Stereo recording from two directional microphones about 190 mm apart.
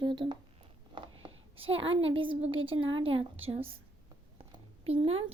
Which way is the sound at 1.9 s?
30° right (ahead or behind).